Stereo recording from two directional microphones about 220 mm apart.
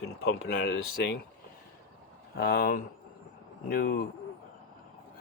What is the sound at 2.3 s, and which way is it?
Speech, 45° left (ahead or behind).